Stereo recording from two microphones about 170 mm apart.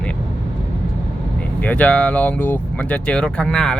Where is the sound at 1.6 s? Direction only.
10° left (ahead or behind).